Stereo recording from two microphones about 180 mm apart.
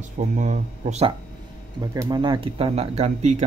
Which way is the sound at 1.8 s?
20° right (ahead or behind).